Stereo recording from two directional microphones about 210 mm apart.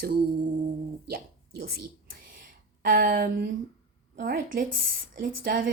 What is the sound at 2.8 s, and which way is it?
A woman's voice, 40° right (ahead or behind).